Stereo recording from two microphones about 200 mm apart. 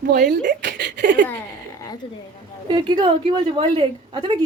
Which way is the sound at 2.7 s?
25° right (ahead or behind).